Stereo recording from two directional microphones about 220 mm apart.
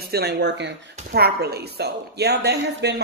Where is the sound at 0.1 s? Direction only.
45° right (ahead or behind).